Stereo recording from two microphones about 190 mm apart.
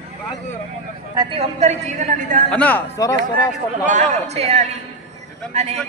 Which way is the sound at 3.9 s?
40° right (ahead or behind).